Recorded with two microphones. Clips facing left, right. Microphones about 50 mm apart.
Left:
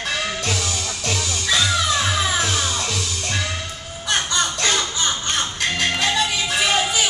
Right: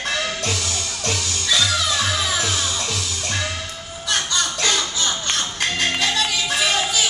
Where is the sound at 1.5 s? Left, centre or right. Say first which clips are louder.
Left 1 dB; centre.